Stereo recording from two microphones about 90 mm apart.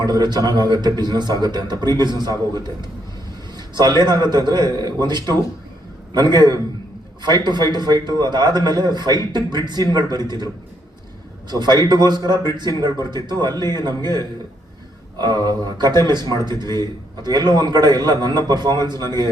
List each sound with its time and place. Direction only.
0.0 s a man's voice: 50° right (ahead or behind)
3.8 s a man's voice: 55° right (ahead or behind)
11.5 s a man's voice: 50° right (ahead or behind)